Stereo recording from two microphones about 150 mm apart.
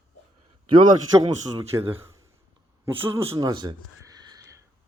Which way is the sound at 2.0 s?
20° right (ahead or behind).